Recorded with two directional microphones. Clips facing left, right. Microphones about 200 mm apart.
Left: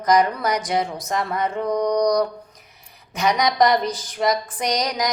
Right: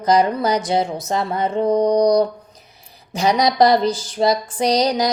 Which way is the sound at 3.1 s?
30° right (ahead or behind).